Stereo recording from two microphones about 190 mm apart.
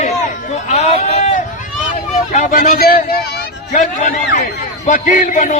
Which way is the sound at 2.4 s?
50° left (ahead or behind).